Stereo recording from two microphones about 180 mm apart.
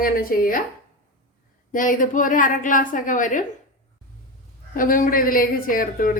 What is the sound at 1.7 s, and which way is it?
Speech, 45° left (ahead or behind).